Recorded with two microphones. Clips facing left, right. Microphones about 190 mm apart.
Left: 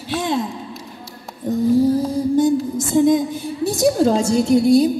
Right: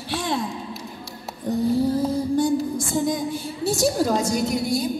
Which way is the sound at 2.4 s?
20° left (ahead or behind).